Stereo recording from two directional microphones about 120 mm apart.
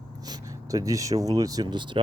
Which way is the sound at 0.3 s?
30° right (ahead or behind).